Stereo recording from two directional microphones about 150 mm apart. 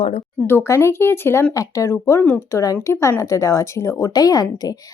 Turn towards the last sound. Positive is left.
turn(degrees=25)  # may be behind; listen again after turning